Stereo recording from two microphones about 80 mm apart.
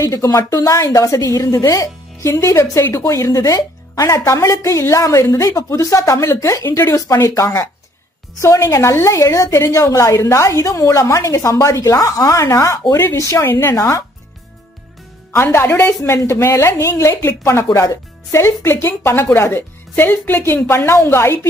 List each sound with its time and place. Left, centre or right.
0.1 s a woman's voice: left
13.5 s a woman's voice: left
13.7 s a woman's voice: left
15.5 s a woman's voice: left